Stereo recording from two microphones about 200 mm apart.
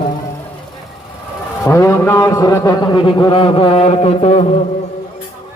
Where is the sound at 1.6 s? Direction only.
15° left (ahead or behind); by 4.4 s 30° left (ahead or behind).